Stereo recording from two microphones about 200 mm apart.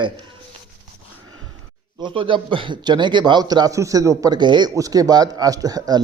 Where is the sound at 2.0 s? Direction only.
25° right (ahead or behind).